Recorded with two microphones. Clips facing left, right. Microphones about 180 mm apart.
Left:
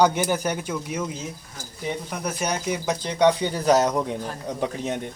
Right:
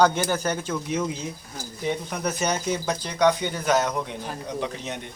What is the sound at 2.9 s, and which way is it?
Speech, 20° left (ahead or behind).